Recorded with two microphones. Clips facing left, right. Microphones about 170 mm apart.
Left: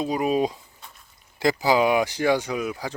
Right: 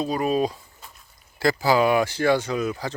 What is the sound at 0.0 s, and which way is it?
Speech, 15° left (ahead or behind).